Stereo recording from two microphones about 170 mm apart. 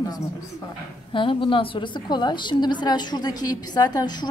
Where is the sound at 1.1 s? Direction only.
30° left (ahead or behind).